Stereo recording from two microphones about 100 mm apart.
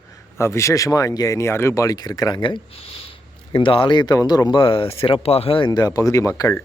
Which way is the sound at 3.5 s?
65° left (ahead or behind).